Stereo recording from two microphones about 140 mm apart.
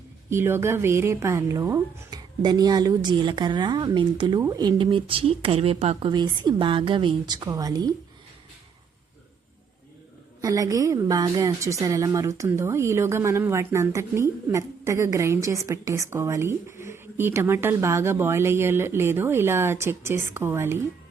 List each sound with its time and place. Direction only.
0.3 s a woman's voice: 15° right (ahead or behind)
10.4 s a woman's voice: 25° right (ahead or behind)